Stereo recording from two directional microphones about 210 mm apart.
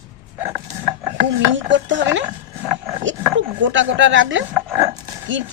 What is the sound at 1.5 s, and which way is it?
Speech, 60° right (ahead or behind).